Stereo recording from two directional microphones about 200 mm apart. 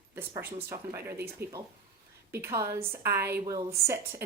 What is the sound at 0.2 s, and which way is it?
A woman's voice, 10° right (ahead or behind).